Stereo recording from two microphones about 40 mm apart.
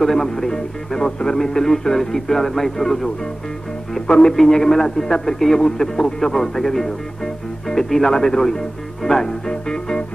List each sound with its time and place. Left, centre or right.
0.0 s speech: centre
4.1 s speech: left
4.4 s speech: centre